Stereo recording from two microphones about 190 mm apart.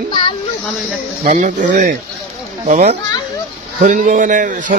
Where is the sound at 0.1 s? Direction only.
25° left (ahead or behind).